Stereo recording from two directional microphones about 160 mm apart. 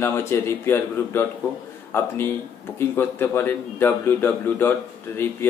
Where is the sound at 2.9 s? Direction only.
15° left (ahead or behind).